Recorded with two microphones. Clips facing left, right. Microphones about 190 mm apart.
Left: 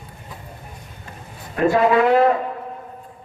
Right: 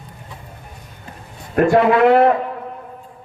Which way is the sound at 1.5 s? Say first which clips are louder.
Right 3 dB; 60° right (ahead or behind).